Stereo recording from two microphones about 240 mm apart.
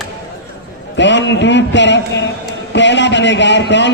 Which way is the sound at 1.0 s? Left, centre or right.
Left.